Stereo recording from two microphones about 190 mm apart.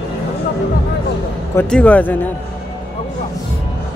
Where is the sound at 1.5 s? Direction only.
10° left (ahead or behind).